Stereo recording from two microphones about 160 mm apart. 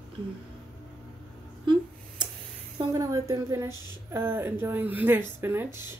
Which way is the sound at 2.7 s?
25° right (ahead or behind).